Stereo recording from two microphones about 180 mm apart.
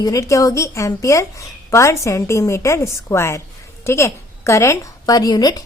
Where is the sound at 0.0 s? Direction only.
20° left (ahead or behind).